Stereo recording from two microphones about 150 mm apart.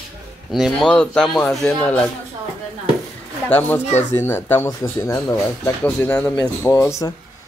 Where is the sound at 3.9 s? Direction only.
50° left (ahead or behind).